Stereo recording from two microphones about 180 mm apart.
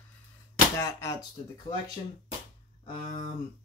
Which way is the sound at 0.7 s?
15° left (ahead or behind).